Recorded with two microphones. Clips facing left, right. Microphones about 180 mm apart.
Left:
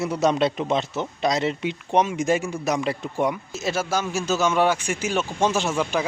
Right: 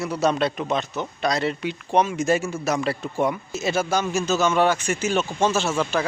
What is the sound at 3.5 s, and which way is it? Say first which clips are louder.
Speech: right 2 dB; centre (ahead or behind).